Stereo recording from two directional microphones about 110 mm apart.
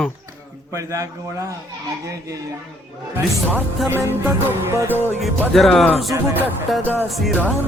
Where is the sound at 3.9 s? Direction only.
20° right (ahead or behind).